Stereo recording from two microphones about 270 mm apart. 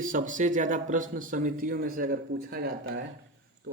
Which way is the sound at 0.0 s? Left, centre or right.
Right.